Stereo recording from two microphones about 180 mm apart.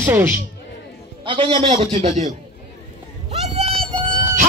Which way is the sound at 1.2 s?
25° right (ahead or behind).